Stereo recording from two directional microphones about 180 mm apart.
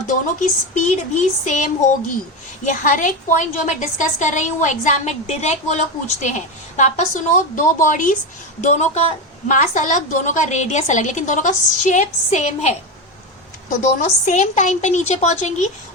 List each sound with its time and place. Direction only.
0.1 s a woman's voice: 45° left (ahead or behind)
13.8 s a woman's voice: 45° left (ahead or behind)